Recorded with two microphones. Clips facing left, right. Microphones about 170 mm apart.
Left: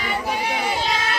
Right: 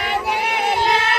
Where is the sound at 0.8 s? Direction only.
60° right (ahead or behind).